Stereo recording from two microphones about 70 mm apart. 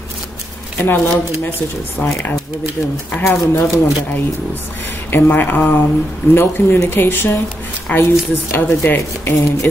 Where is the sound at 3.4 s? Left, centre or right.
Left.